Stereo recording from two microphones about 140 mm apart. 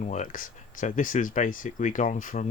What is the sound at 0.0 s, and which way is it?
Speech, 60° left (ahead or behind).